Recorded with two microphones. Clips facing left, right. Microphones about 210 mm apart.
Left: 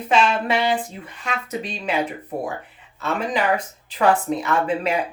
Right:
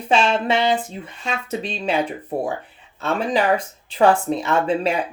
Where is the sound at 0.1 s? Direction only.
25° right (ahead or behind).